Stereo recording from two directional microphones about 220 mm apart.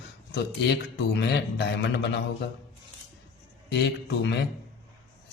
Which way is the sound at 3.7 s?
50° left (ahead or behind).